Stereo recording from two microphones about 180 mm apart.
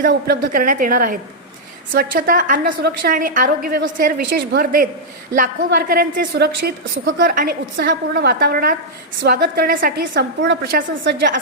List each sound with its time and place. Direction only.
0.0 s a woman's voice: 60° right (ahead or behind)
8.1 s a woman's voice: 65° right (ahead or behind); by 11.2 s 80° right